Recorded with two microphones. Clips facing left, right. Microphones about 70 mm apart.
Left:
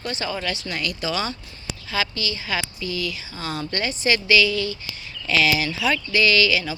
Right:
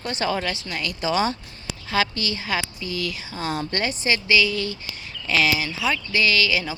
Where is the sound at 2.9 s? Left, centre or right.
Right.